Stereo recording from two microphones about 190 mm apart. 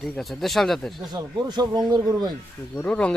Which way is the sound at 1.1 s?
20° right (ahead or behind).